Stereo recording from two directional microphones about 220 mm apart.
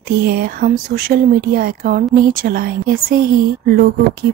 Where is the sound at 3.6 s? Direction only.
40° right (ahead or behind).